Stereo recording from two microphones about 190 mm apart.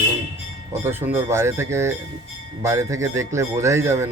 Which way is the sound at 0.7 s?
10° right (ahead or behind).